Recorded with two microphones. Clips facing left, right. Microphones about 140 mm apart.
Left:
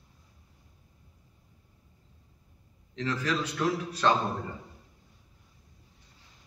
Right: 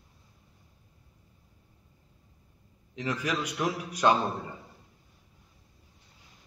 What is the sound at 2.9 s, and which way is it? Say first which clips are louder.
A man's voice: left 1 dB; 15° right (ahead or behind).